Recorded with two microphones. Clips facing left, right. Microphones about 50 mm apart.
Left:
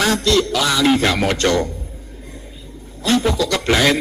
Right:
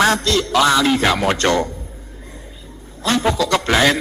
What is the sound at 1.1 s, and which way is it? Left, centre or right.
Speech, right.